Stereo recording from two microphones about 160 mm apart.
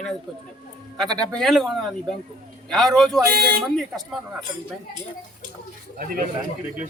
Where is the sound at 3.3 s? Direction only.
75° right (ahead or behind).